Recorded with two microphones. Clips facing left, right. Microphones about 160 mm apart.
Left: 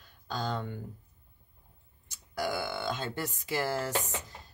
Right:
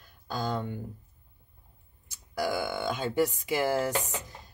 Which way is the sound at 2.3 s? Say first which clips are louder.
Right 3 dB; 10° right (ahead or behind).